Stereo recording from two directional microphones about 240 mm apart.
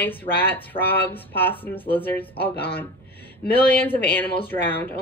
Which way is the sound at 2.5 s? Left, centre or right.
Left.